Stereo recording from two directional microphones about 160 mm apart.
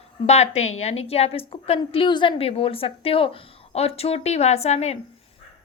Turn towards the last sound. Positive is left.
turn(degrees=40)  # may be behind; listen again after turning